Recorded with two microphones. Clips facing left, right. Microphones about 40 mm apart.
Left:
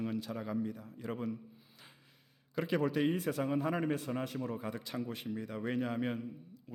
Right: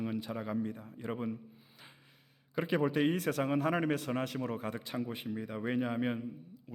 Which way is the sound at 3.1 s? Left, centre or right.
Right.